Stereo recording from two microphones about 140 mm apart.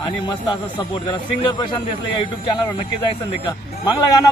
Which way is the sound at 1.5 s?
30° left (ahead or behind).